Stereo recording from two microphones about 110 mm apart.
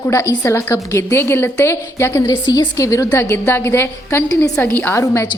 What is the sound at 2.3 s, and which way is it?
A woman's voice, 40° left (ahead or behind).